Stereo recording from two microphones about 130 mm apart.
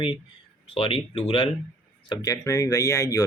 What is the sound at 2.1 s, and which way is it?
Speech, 30° left (ahead or behind).